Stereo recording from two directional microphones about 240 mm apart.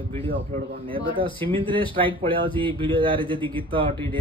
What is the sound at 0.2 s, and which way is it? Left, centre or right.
Speech, right.